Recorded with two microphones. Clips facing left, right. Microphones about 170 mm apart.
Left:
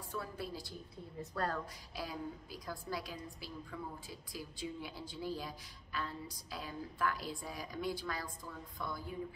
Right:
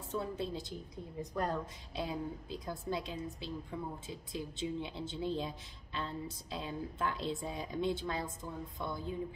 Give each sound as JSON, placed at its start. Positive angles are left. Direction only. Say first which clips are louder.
{"t": 0.1, "sound": "a woman's voice", "louder": "right 6 dB", "side_deg": -20}